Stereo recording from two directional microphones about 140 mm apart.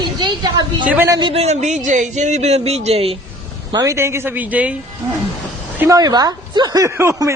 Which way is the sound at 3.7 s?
20° right (ahead or behind).